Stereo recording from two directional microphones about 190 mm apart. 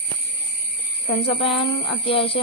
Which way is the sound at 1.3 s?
30° left (ahead or behind).